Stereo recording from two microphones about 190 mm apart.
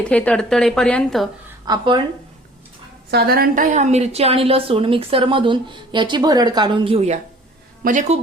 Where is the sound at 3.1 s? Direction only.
55° right (ahead or behind).